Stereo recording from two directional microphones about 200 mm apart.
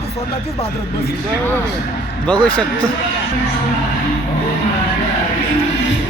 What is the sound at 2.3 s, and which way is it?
Speech, 5° left (ahead or behind).